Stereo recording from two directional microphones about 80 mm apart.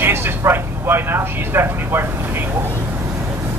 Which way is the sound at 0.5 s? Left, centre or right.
Right.